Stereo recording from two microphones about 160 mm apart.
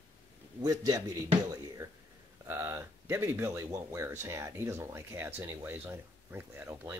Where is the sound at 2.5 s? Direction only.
20° right (ahead or behind).